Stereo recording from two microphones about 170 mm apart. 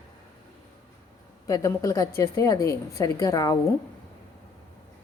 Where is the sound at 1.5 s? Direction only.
20° left (ahead or behind).